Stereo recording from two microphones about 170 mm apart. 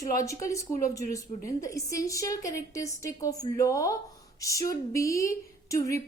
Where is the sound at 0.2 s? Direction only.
20° left (ahead or behind).